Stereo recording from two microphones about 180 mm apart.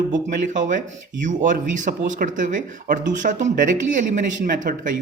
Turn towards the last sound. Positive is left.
turn(degrees=-50)  # may be behind; listen again after turning